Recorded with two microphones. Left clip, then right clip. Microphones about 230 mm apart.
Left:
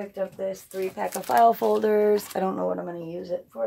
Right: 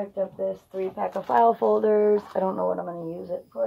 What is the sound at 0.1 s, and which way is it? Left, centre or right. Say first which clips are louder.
Speech: right 2 dB; left.